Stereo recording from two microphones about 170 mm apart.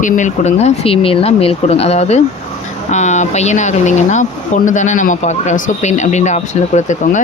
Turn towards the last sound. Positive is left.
turn(degrees=45)  # may be behind; listen again after turning